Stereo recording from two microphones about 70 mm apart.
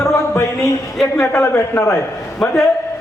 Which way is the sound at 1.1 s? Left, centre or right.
Left.